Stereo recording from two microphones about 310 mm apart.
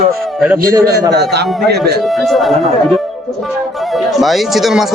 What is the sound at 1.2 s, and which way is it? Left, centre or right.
Speech, right.